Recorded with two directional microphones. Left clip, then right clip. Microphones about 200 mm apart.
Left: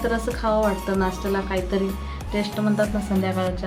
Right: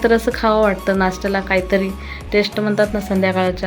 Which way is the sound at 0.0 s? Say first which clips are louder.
Right 9 dB; 30° right (ahead or behind).